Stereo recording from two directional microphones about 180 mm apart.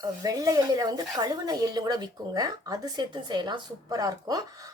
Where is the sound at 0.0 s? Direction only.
20° right (ahead or behind).